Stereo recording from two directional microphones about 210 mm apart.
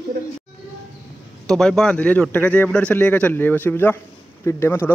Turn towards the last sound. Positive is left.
turn(degrees=10)  # may be behind; listen again after turning